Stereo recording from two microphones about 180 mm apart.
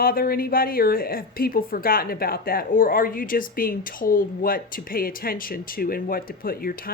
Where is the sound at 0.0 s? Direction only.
55° left (ahead or behind).